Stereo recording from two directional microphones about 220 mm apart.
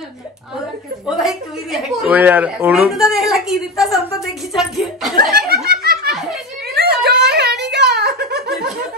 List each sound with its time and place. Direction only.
1.0 s a woman's voice: centre (ahead or behind)
5.5 s laughter: 45° right (ahead or behind)
6.7 s a sound: 45° right (ahead or behind)